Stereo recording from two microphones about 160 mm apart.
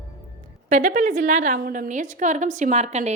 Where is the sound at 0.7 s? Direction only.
50° right (ahead or behind).